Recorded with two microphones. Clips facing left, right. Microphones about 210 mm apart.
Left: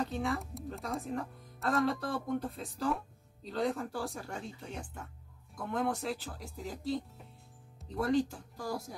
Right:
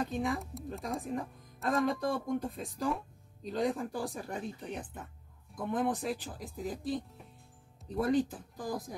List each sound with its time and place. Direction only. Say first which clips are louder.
0.1 s speech: right 1 dB; 15° right (ahead or behind)
0.7 s speech: right 1 dB; centre (ahead or behind)
1.0 s speech: right 1 dB; 15° right (ahead or behind)